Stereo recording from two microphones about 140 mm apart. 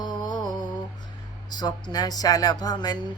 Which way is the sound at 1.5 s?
30° left (ahead or behind).